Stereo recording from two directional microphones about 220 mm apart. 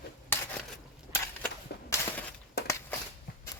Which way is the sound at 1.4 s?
10° left (ahead or behind).